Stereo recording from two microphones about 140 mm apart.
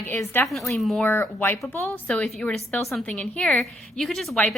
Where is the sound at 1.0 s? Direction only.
15° left (ahead or behind).